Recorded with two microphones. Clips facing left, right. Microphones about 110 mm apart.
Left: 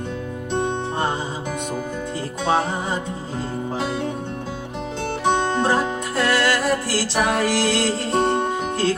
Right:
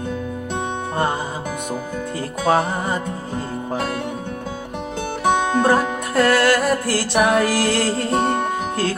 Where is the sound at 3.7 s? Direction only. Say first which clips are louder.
Right 2 dB; 55° right (ahead or behind).